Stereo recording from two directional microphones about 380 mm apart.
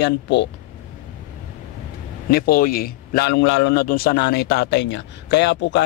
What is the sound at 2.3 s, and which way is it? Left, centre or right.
A man's voice, left.